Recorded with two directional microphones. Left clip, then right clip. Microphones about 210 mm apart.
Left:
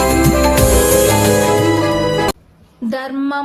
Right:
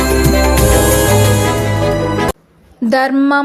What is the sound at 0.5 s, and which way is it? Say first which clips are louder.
Music: even; centre (ahead or behind).